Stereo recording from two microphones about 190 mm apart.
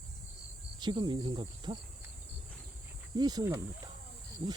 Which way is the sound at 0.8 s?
25° right (ahead or behind).